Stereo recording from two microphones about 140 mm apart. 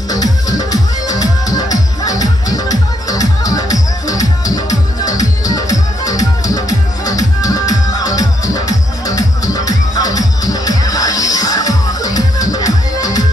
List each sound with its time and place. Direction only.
0.1 s music: 25° left (ahead or behind)